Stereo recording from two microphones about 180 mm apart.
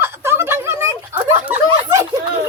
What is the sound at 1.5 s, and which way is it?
Snicker, 15° right (ahead or behind).